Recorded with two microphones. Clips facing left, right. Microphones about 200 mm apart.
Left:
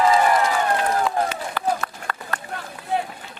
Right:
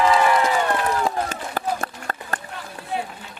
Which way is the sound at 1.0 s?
45° right (ahead or behind).